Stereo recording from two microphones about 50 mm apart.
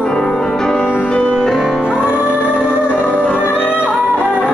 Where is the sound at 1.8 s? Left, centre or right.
Centre.